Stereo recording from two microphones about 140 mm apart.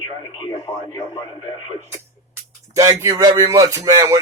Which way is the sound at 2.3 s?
20° right (ahead or behind).